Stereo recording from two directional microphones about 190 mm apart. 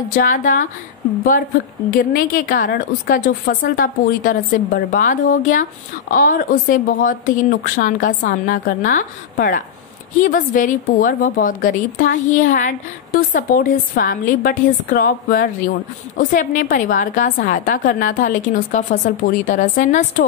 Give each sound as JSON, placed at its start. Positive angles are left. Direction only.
{"t": 0.1, "sound": "a woman's voice", "side_deg": 45}
{"t": 1.9, "sound": "a woman's voice", "side_deg": 45}